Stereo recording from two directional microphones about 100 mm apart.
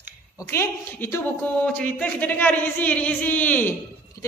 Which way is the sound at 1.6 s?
10° left (ahead or behind).